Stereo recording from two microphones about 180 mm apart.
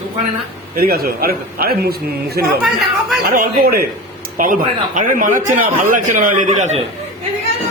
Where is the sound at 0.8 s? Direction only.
55° right (ahead or behind).